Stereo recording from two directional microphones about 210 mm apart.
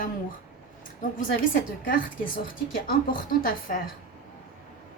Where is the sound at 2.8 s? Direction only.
45° left (ahead or behind).